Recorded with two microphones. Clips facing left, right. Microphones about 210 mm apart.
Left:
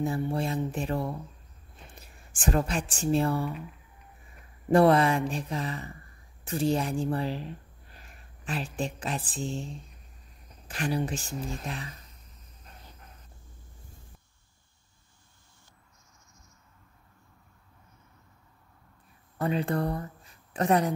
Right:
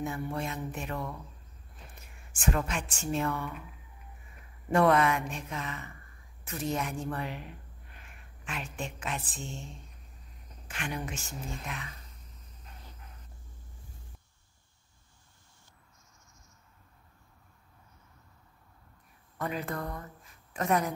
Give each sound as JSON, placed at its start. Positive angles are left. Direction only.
{"t": 0.0, "sound": "speech", "side_deg": 30}
{"t": 4.6, "sound": "speech", "side_deg": 30}
{"t": 19.3, "sound": "speech", "side_deg": 30}